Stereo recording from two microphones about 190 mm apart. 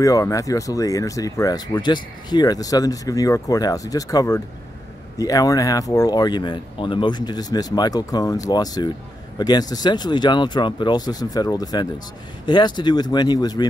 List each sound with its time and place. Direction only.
0.0 s speech: 20° left (ahead or behind)